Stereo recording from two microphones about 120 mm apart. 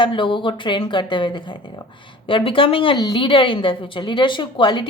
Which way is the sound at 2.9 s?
35° left (ahead or behind).